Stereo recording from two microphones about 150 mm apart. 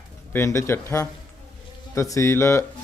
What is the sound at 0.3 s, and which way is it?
Speech, 20° left (ahead or behind).